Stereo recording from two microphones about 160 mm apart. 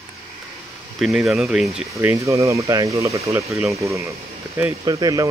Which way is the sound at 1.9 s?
20° right (ahead or behind).